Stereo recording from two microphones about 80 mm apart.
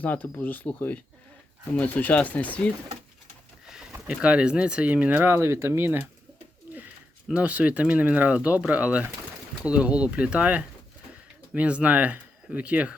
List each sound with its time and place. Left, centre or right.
0.0 s speech: left
4.0 s speech: centre; by 6.1 s right
7.3 s speech: centre